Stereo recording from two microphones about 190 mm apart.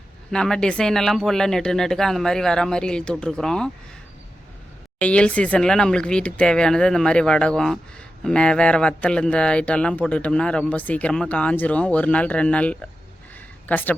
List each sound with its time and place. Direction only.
0.3 s speech: 5° left (ahead or behind)
4.9 s a woman's voice: 5° left (ahead or behind)